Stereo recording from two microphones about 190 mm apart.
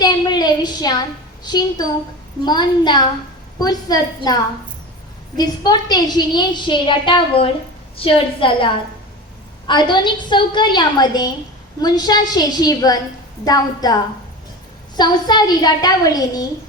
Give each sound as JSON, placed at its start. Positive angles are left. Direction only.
{"t": 0.0, "sound": "a sound", "side_deg": 20}
{"t": 1.5, "sound": "a woman's voice", "side_deg": 20}
{"t": 5.4, "sound": "a woman's voice", "side_deg": 20}